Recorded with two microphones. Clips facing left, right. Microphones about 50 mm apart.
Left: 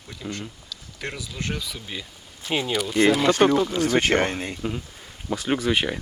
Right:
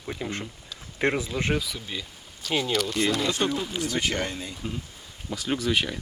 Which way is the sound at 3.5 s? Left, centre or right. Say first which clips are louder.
Left 8 dB; left.